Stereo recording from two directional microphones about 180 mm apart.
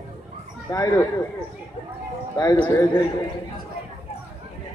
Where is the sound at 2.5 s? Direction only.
15° left (ahead or behind).